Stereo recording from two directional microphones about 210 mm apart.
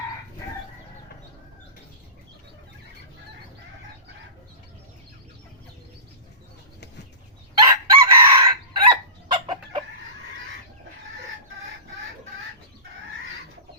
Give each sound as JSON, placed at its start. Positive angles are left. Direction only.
{"t": 7.6, "sound": "chicken", "side_deg": -20}